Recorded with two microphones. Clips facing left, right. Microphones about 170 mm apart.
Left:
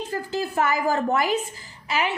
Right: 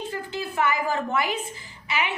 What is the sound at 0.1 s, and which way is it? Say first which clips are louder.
A woman's voice: left 4 dB; 40° left (ahead or behind).